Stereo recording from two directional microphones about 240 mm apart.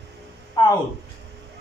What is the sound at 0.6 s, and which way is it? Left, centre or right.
Speech, centre.